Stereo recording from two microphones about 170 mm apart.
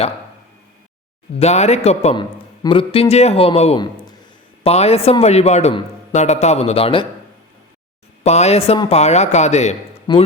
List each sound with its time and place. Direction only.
1.4 s a man's voice: 40° left (ahead or behind)
8.2 s a man's voice: 40° left (ahead or behind)
10.1 s speech: 25° left (ahead or behind)